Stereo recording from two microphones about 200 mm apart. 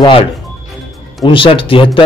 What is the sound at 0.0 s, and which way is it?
A man's voice, 25° left (ahead or behind).